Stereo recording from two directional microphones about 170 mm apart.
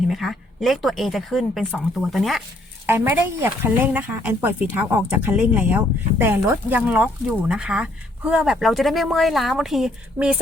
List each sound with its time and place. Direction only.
0.1 s a woman's voice: centre (ahead or behind)
2.8 s speech: 10° right (ahead or behind)